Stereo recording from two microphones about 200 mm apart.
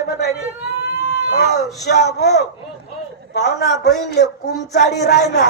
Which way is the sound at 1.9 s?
55° left (ahead or behind).